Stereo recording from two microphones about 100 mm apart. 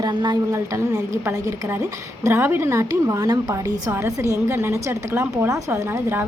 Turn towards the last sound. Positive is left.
turn(degrees=-25)  # may be behind; listen again after turning